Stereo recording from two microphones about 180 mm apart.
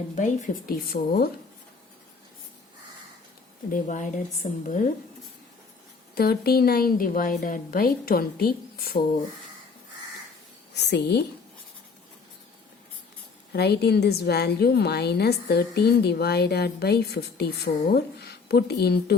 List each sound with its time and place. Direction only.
0.2 s a woman's voice: 45° left (ahead or behind)
3.7 s speech: 45° left (ahead or behind)
6.1 s a woman's voice: 60° left (ahead or behind)
10.8 s a woman's voice: 70° left (ahead or behind)
13.5 s a woman's voice: 65° left (ahead or behind)